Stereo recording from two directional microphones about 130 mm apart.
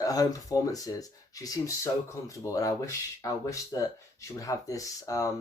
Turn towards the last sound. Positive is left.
turn(degrees=25)  # may be behind; listen again after turning